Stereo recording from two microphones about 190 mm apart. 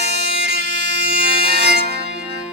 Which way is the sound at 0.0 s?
60° right (ahead or behind).